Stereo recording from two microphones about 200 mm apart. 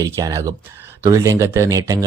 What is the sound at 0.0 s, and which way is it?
Speech, 15° right (ahead or behind).